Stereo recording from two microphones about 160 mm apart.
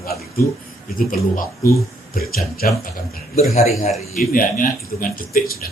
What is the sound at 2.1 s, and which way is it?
Speech, 70° left (ahead or behind).